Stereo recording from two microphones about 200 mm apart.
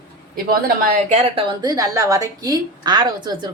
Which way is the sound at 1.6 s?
20° right (ahead or behind).